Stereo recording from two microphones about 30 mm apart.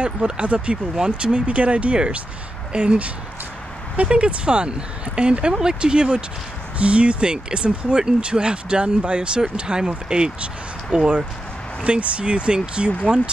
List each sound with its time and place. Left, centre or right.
0.0 s speech: right
0.9 s speech: right
1.3 s speech: right
2.7 s speech: right
4.1 s speech: right
11.8 s speech: right